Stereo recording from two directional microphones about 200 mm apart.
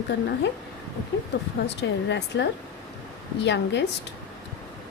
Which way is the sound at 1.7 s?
60° left (ahead or behind).